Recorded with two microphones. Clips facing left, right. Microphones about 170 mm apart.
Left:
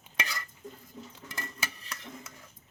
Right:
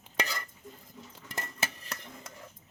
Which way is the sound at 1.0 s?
45° left (ahead or behind).